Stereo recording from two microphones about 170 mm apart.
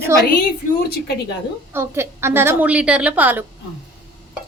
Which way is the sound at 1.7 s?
15° right (ahead or behind).